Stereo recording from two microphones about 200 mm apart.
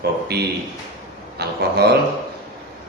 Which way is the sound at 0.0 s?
55° right (ahead or behind).